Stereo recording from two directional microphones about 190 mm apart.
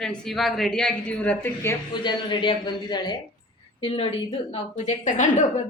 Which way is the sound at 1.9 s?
25° left (ahead or behind).